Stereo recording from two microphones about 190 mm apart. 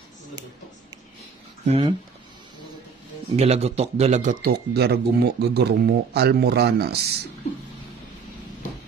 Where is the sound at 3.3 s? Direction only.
35° right (ahead or behind); by 7.2 s 55° right (ahead or behind).